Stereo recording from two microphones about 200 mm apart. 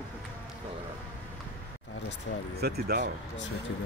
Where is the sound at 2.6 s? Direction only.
50° right (ahead or behind).